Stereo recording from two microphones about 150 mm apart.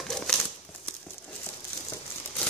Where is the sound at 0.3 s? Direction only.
5° left (ahead or behind).